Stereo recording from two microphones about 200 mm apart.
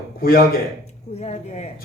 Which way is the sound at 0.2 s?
50° left (ahead or behind).